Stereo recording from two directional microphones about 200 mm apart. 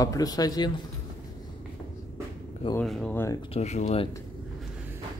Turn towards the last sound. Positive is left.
turn(degrees=35)  # may be behind; listen again after turning